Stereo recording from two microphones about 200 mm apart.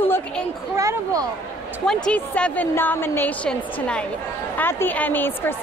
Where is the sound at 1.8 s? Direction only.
5° left (ahead or behind).